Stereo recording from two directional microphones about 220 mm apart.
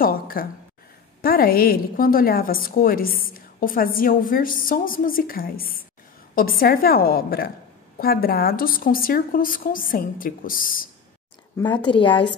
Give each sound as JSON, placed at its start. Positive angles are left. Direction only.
{"t": 0.0, "sound": "a sound", "side_deg": 40}
{"t": 1.2, "sound": "a woman's voice", "side_deg": 40}
{"t": 11.5, "sound": "a woman's voice", "side_deg": 20}